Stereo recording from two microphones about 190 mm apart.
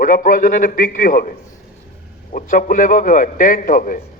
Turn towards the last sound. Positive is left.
turn(degrees=45)  # may be behind; listen again after turning